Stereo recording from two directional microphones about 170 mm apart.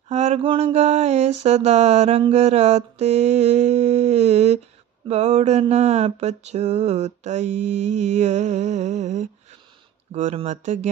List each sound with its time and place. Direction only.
0.1 s mantra: 45° right (ahead or behind)